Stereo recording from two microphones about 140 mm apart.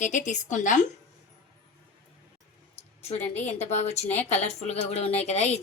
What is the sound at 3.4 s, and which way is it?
A woman's voice, 50° left (ahead or behind).